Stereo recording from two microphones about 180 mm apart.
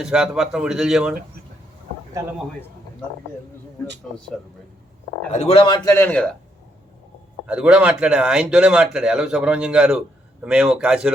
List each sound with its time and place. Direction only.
0.0 s speech: 5° right (ahead or behind)
5.3 s a man's voice: 35° left (ahead or behind); by 6.3 s 10° left (ahead or behind)
7.4 s speech: 5° right (ahead or behind)